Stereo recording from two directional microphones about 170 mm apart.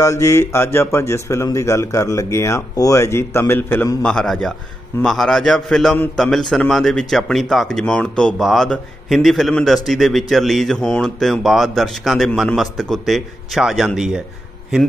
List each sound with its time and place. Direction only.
0.0 s a man's voice: 20° left (ahead or behind); by 14.2 s 5° right (ahead or behind)